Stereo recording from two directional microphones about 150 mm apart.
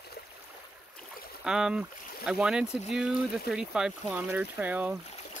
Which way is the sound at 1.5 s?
5° right (ahead or behind).